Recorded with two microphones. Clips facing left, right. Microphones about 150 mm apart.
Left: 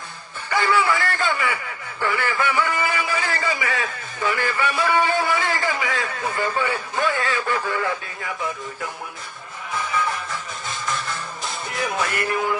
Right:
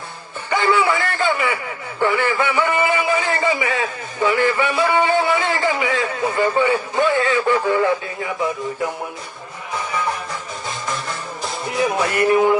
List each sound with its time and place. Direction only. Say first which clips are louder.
0.5 s a man's voice: right 3 dB; 20° right (ahead or behind)
10.7 s music: right 1 dB; 20° right (ahead or behind)
11.7 s speech: right 6 dB; 25° right (ahead or behind)